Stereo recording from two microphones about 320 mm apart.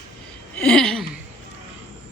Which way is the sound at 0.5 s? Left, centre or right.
Centre.